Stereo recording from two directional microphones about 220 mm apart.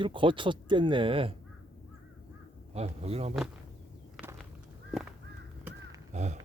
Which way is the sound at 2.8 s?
30° right (ahead or behind).